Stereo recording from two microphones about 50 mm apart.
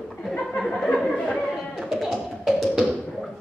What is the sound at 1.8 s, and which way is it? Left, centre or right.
Tap, centre.